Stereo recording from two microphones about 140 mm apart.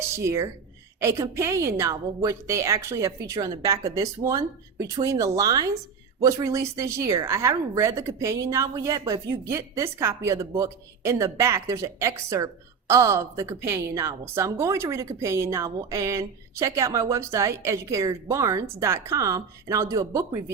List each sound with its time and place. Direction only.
0.2 s a woman's voice: 20° right (ahead or behind)